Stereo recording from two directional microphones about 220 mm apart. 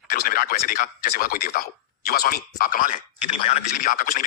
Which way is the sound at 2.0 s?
45° left (ahead or behind).